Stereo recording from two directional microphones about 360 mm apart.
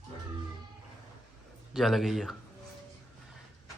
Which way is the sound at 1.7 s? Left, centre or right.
Centre.